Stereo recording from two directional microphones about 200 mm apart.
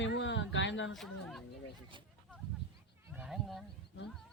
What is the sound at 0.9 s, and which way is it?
Speech, centre (ahead or behind).